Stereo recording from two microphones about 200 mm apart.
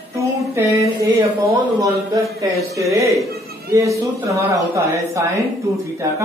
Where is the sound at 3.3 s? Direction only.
50° right (ahead or behind).